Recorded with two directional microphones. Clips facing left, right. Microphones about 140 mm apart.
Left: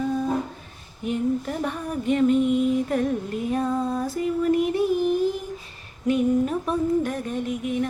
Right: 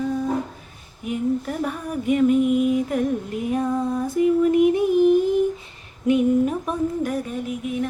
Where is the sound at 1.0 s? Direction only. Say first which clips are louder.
Right 1 dB; 5° right (ahead or behind).